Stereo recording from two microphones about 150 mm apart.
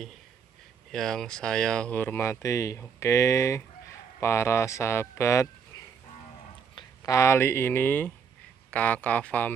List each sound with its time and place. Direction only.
0.9 s speech: 5° left (ahead or behind); by 5.5 s 20° left (ahead or behind)
6.7 s speech: 30° left (ahead or behind); by 9.5 s 10° left (ahead or behind)